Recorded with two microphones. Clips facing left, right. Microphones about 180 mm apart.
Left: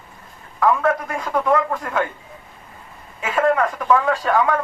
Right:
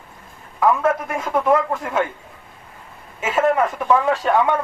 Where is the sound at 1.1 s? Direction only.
20° right (ahead or behind).